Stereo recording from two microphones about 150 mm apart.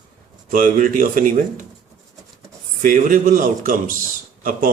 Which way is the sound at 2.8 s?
65° right (ahead or behind).